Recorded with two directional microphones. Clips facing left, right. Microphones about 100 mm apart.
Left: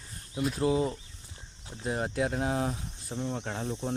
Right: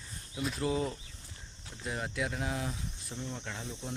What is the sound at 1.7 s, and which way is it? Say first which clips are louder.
Speech: left 6 dB; 30° left (ahead or behind).